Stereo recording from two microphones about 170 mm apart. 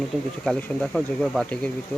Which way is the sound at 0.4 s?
5° left (ahead or behind).